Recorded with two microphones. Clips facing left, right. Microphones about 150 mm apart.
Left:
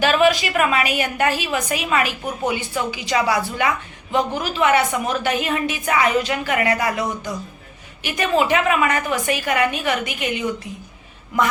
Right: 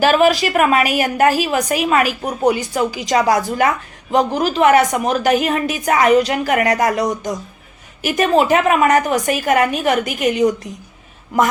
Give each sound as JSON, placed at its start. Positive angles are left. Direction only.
{"t": 0.0, "sound": "a woman's voice", "side_deg": -40}